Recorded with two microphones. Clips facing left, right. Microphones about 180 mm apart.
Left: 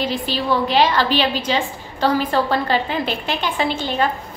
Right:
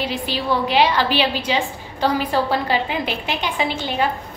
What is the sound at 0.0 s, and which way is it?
A woman's voice, 10° right (ahead or behind).